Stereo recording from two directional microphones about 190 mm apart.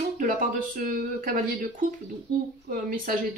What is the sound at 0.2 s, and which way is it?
A woman's voice, 45° right (ahead or behind).